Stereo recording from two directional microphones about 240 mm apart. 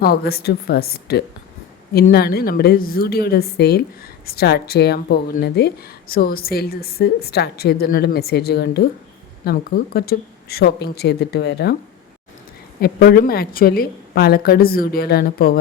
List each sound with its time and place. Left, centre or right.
0.0 s a woman's voice: left
12.8 s speech: left